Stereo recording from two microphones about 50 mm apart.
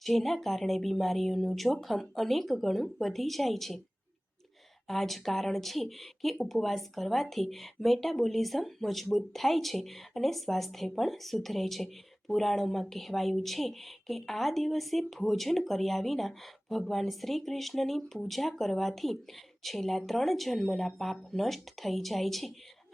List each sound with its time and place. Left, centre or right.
0.0 s speech: centre
4.9 s speech: centre